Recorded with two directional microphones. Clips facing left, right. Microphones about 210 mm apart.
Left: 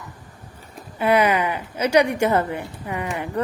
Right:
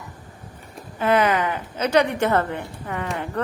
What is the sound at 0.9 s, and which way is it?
A woman's voice, 10° left (ahead or behind).